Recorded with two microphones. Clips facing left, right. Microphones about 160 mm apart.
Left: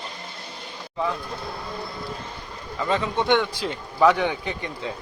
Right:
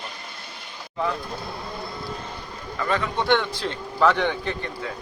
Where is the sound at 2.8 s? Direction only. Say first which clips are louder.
Left 1 dB; 25° left (ahead or behind).